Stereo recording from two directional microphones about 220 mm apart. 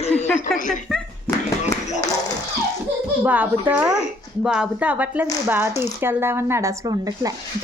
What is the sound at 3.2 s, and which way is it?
Speech, 5° right (ahead or behind).